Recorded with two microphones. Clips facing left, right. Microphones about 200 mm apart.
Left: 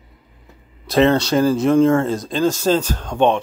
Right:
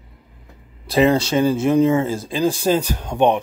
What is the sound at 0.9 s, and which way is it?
Speech, 5° right (ahead or behind).